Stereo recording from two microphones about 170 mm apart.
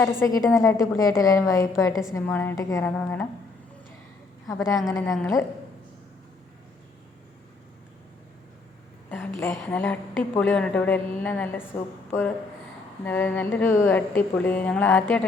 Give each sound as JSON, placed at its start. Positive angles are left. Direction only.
{"t": 0.0, "sound": "a woman's voice", "side_deg": 15}
{"t": 2.8, "sound": "a woman's voice", "side_deg": 5}
{"t": 4.4, "sound": "a woman's voice", "side_deg": 20}
{"t": 9.6, "sound": "a woman's voice", "side_deg": 10}